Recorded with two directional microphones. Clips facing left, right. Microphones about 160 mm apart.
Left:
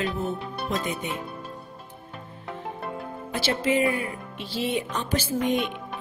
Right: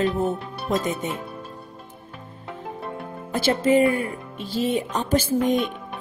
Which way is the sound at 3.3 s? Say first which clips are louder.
Right 6 dB; 45° right (ahead or behind).